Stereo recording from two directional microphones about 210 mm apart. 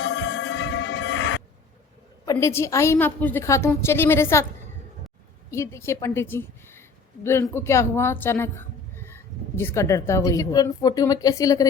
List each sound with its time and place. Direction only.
0.0 s music: 55° left (ahead or behind)
2.2 s a woman's voice: 15° left (ahead or behind)
5.5 s a woman's voice: 15° left (ahead or behind)